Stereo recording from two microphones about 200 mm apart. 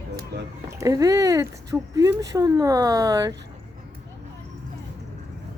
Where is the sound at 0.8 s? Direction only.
15° right (ahead or behind).